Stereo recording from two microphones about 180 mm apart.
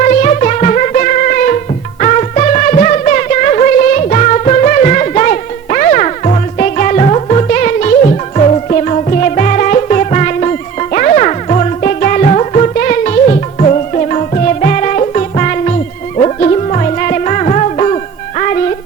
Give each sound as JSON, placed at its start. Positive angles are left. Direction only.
{"t": 0.0, "sound": "music", "side_deg": 45}